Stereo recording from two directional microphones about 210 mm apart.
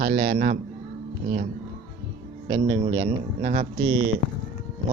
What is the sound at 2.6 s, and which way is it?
Speech, 50° right (ahead or behind).